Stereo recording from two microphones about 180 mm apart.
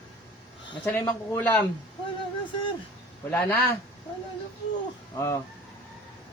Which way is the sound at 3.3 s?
10° left (ahead or behind).